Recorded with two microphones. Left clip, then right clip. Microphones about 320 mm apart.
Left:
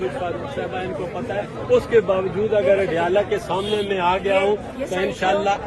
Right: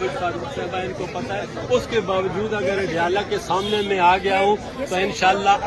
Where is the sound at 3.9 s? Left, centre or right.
Centre.